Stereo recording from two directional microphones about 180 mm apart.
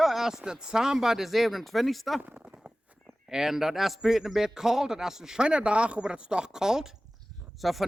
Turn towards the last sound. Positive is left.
turn(degrees=0)  # may be behind; listen again after turning